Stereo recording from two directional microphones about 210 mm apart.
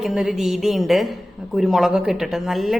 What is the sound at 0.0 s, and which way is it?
Speech, centre (ahead or behind).